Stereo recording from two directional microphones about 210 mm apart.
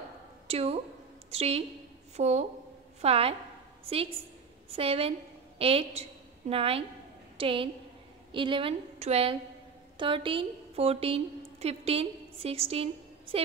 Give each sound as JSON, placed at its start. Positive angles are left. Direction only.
{"t": 0.5, "sound": "a woman's voice", "side_deg": -30}
{"t": 4.6, "sound": "a woman's voice", "side_deg": -25}